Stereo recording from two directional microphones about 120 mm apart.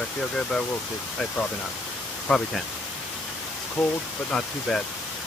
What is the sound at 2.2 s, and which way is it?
Speech, 5° left (ahead or behind).